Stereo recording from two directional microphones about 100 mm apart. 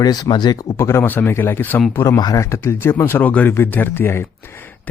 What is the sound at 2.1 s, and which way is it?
Speech, 40° left (ahead or behind).